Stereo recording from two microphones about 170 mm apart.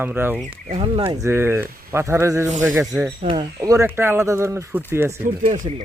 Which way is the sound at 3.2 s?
30° right (ahead or behind).